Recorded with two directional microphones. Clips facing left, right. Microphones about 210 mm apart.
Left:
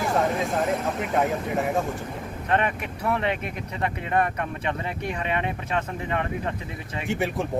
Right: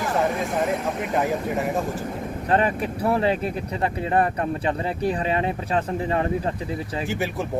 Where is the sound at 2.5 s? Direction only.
35° right (ahead or behind).